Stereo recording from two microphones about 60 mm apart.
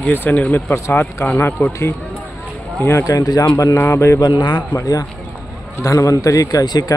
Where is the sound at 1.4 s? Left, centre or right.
Left.